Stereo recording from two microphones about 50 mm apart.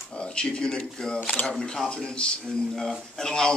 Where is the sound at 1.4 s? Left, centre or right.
Left.